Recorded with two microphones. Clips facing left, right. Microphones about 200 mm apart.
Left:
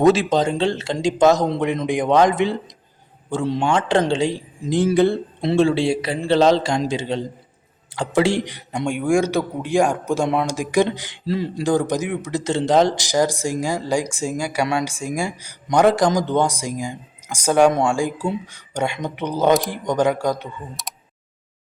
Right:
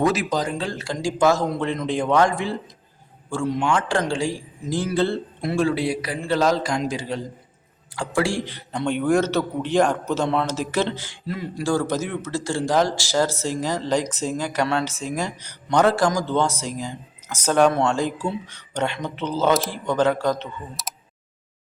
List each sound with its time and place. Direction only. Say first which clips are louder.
0.0 s speech: left 6 dB; 25° left (ahead or behind)
5.5 s speech: left 5 dB; 25° left (ahead or behind)
11.3 s speech: left 6 dB; 30° left (ahead or behind)
11.6 s speech: left 2 dB; 15° left (ahead or behind)
20.8 s speech: even; centre (ahead or behind)